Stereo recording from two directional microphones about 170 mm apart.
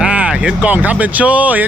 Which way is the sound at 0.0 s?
5° right (ahead or behind).